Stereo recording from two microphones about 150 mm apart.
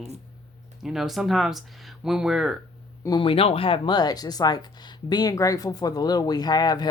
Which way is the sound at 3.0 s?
30° left (ahead or behind).